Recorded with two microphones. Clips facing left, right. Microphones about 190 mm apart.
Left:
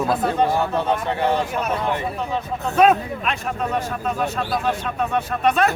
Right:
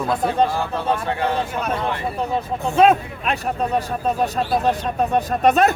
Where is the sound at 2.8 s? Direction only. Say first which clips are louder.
Right 1 dB; 30° right (ahead or behind).